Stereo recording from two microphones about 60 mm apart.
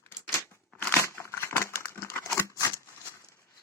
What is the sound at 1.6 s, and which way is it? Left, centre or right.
Crumpling, left.